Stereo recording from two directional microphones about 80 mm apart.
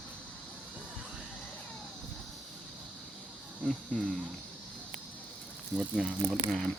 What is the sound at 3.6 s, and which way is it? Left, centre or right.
Speech, centre.